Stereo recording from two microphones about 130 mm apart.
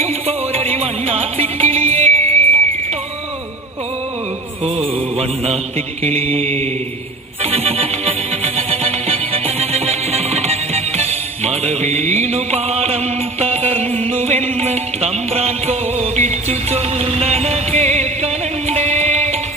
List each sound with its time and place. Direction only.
0.0 s music: 50° right (ahead or behind)
4.6 s mantra: 50° right (ahead or behind)
7.4 s music: 50° right (ahead or behind)